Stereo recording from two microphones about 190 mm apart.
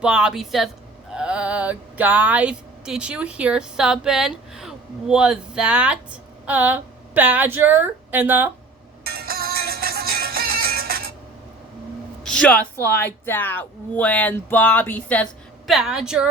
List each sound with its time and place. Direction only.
0.0 s a woman's voice: 5° right (ahead or behind)
9.0 s music: 55° right (ahead or behind)
12.2 s speech: 5° left (ahead or behind)